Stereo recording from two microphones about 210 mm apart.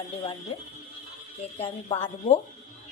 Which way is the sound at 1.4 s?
30° left (ahead or behind).